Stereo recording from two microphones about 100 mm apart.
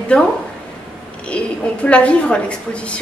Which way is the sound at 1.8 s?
10° left (ahead or behind).